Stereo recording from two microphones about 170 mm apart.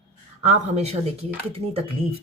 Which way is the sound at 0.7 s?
35° right (ahead or behind).